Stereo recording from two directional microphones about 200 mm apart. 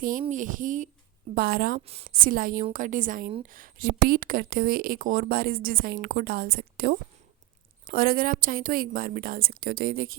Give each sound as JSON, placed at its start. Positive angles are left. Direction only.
{"t": 0.0, "sound": "a woman's voice", "side_deg": -40}